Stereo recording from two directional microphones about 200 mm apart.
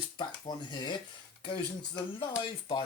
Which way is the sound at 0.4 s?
20° left (ahead or behind).